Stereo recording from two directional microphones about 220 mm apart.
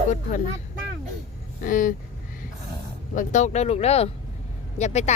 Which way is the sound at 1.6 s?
35° left (ahead or behind).